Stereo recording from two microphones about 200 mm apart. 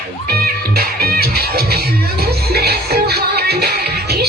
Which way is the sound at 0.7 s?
50° right (ahead or behind).